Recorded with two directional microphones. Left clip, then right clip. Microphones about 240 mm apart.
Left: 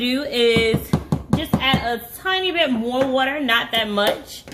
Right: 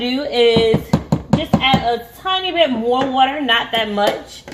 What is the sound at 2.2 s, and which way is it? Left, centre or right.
A woman's voice, left.